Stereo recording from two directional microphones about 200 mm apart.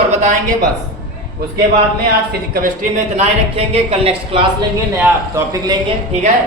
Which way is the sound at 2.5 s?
40° right (ahead or behind).